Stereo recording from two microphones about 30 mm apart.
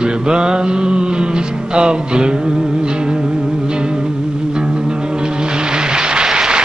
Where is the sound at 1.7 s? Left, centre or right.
Right.